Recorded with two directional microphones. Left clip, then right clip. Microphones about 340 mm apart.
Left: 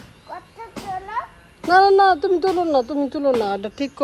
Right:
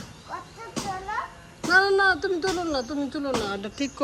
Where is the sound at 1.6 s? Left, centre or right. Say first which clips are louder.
Left 6 dB; centre.